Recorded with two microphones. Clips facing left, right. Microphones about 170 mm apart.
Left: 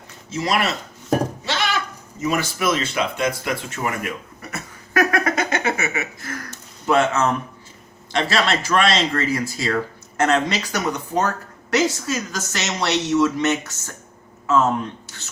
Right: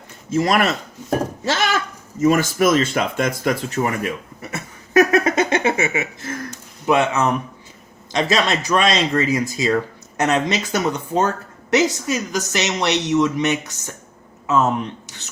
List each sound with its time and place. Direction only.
0.3 s speech: 50° right (ahead or behind)
1.5 s goat: 45° right (ahead or behind)
2.2 s speech: 45° right (ahead or behind)
4.5 s a sound: 25° right (ahead or behind)
8.1 s speech: 20° right (ahead or behind)